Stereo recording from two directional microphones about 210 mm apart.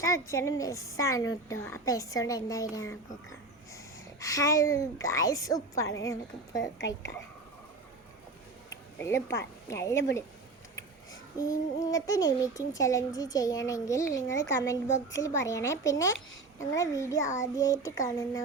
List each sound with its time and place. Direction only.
0.0 s a woman's voice: 15° left (ahead or behind)
4.2 s a woman's voice: 15° left (ahead or behind)
6.6 s a woman's voice: 60° left (ahead or behind)
9.0 s a woman's voice: 15° left (ahead or behind)
11.8 s a woman's voice: 15° left (ahead or behind)